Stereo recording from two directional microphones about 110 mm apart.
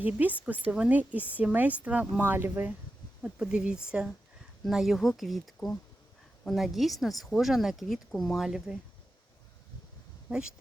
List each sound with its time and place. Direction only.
0.0 s a woman's voice: 15° right (ahead or behind)
10.2 s speech: 5° right (ahead or behind)